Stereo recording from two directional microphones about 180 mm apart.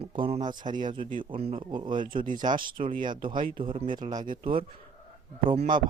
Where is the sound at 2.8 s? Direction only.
50° right (ahead or behind).